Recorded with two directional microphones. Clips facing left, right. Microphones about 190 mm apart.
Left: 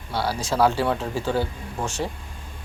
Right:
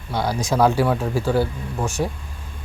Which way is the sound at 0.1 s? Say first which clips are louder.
Right 3 dB; 15° right (ahead or behind).